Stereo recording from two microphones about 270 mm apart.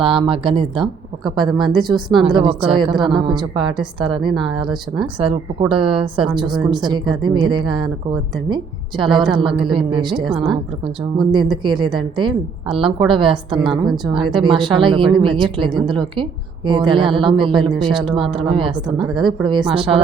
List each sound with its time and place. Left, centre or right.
0.0 s a woman's voice: centre
9.5 s a woman's voice: centre
9.7 s speech: centre
10.2 s a woman's voice: centre
11.2 s a woman's voice: centre